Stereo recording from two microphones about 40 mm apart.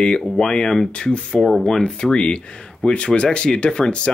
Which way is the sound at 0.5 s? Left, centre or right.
Centre.